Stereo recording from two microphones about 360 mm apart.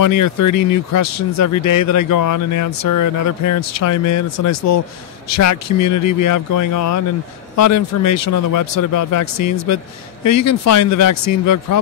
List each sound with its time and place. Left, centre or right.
0.0 s speech: left